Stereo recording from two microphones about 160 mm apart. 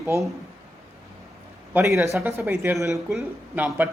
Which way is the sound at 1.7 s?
15° right (ahead or behind).